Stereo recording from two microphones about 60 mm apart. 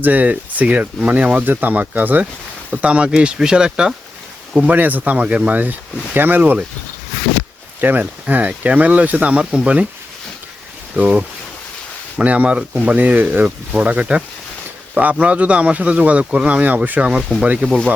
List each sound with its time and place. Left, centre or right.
0.0 s speech: right
2.6 s speech: centre
4.5 s speech: right
7.8 s speech: right
9.3 s speech: centre
10.9 s speech: centre